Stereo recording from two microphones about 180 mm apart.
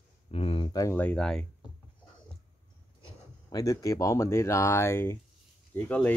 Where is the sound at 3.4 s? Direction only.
20° left (ahead or behind).